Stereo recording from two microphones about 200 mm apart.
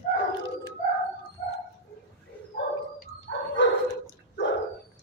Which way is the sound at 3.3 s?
70° left (ahead or behind).